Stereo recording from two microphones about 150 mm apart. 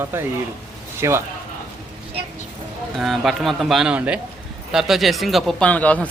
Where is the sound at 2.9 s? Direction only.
Centre (ahead or behind).